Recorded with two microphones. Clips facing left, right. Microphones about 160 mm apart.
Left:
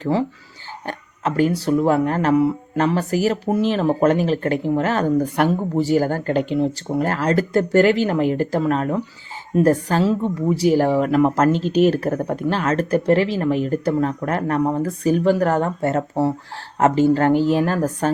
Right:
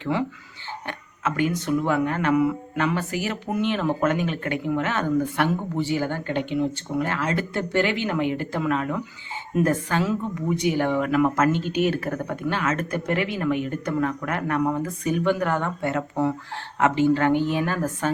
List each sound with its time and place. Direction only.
0.0 s speech: 35° left (ahead or behind)